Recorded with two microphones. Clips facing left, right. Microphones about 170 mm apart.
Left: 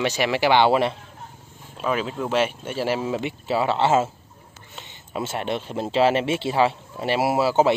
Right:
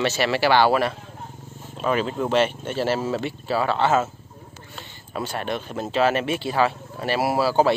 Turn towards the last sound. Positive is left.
turn(degrees=20)  # may be behind; listen again after turning